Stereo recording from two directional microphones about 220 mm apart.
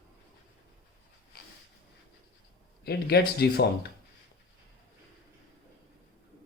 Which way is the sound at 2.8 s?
45° left (ahead or behind).